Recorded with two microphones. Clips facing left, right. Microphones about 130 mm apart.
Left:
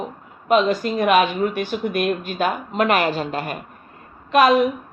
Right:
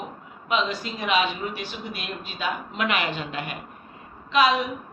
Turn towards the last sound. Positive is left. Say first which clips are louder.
# left 6 dB
turn(degrees=50)  # may be behind; listen again after turning